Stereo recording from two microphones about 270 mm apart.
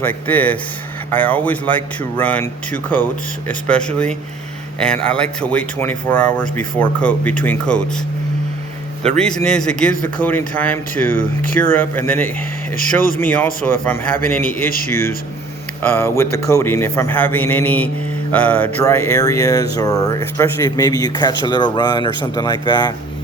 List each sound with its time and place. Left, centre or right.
0.1 s speech: centre
9.0 s a man's voice: centre
15.8 s a man's voice: centre